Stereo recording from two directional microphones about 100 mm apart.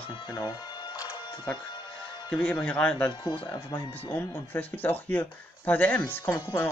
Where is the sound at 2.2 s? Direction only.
10° left (ahead or behind).